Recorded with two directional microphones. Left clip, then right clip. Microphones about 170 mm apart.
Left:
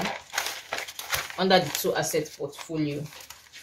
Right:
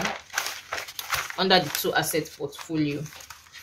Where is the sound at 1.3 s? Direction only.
25° right (ahead or behind).